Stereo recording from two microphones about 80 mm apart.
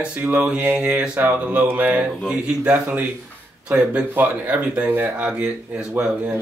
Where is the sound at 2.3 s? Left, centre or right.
Centre.